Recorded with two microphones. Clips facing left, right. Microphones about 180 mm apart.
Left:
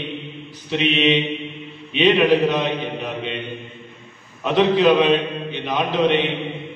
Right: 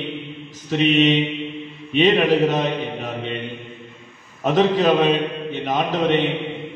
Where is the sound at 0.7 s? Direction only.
40° right (ahead or behind).